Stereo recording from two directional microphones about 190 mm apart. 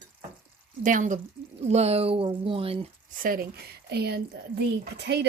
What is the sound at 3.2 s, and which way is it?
Speech, 50° right (ahead or behind).